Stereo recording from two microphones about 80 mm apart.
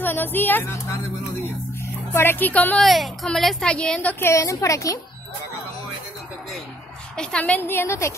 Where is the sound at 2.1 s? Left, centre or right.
Left.